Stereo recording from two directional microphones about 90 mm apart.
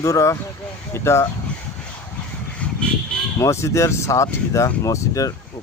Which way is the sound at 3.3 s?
30° left (ahead or behind).